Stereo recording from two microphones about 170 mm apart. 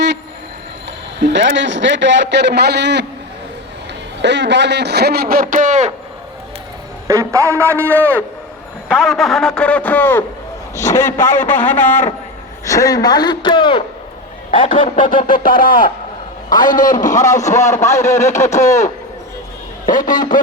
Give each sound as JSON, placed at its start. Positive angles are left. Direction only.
{"t": 1.2, "sound": "a man's voice", "side_deg": -90}
{"t": 4.2, "sound": "a man's voice", "side_deg": -90}
{"t": 7.1, "sound": "a man's voice", "side_deg": -20}
{"t": 8.9, "sound": "a man's voice", "side_deg": 0}
{"t": 15.1, "sound": "a man's voice", "side_deg": 55}
{"t": 17.8, "sound": "a man's voice", "side_deg": 15}
{"t": 20.0, "sound": "a man's voice", "side_deg": 25}